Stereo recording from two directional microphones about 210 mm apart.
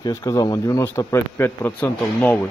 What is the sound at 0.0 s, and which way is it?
Speech, 15° left (ahead or behind).